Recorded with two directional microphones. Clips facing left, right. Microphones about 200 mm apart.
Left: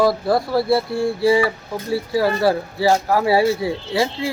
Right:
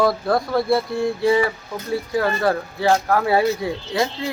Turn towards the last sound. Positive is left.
turn(degrees=5)  # may be behind; listen again after turning